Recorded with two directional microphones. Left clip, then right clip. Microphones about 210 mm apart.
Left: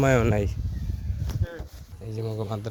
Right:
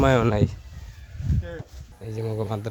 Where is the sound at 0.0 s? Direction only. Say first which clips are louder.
Right 2 dB; 10° right (ahead or behind).